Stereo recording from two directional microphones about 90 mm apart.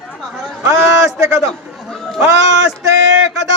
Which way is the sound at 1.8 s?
5° left (ahead or behind).